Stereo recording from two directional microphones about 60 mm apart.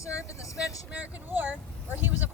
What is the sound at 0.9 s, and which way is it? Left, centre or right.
Speech, right.